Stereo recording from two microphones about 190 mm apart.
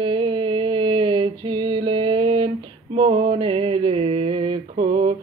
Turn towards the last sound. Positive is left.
turn(degrees=-25)  # may be behind; listen again after turning